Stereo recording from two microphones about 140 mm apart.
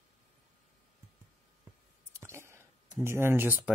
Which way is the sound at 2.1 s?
20° right (ahead or behind).